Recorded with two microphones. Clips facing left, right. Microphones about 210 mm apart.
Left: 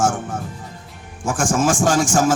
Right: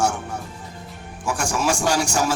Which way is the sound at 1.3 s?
50° left (ahead or behind).